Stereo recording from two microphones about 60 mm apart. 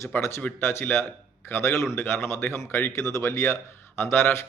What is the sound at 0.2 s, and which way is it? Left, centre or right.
Speech, left.